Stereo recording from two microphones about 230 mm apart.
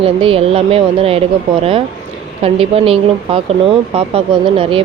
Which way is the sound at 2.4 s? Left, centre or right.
Right.